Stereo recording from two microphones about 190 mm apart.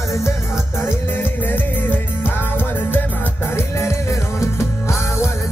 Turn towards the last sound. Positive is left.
turn(degrees=15)  # may be behind; listen again after turning